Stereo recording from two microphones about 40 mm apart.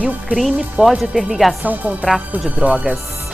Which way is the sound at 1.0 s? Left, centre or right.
Centre.